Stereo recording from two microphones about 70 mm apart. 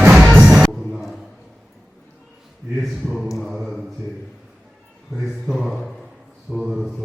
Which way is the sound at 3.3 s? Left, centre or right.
Centre.